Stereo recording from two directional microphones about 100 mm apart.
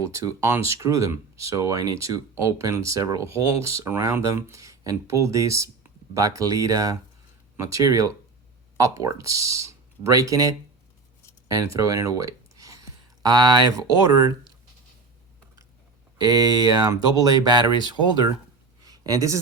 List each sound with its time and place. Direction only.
0.0 s speech: 30° right (ahead or behind)
16.1 s speech: 40° right (ahead or behind)
18.8 s a sound: 40° right (ahead or behind)